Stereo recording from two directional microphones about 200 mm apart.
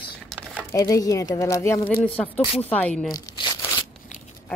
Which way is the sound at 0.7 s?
15° left (ahead or behind).